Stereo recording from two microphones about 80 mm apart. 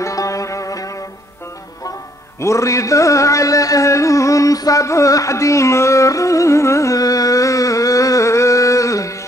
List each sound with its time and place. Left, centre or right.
0.0 s music: left
2.4 s carnatic music: left